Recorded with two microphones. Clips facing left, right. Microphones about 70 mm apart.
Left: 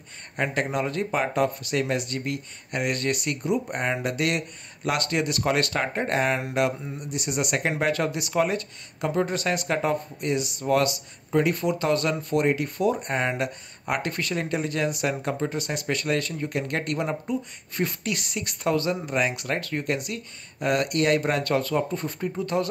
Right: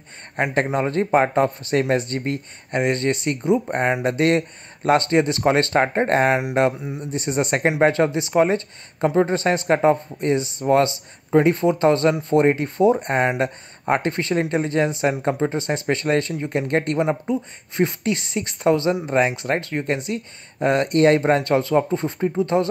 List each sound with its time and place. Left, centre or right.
0.4 s speech: right